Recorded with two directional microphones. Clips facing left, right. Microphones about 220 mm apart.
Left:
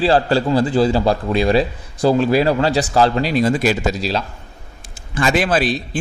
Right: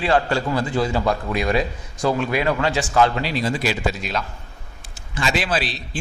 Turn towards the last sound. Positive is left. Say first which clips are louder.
# left 7 dB
turn(degrees=50)  # may be behind; listen again after turning